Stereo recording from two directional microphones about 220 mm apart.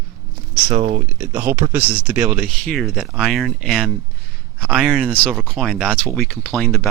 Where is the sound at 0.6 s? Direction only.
35° right (ahead or behind).